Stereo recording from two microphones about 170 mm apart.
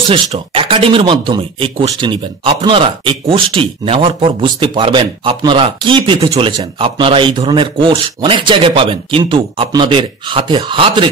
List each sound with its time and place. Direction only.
0.1 s speech: 30° right (ahead or behind)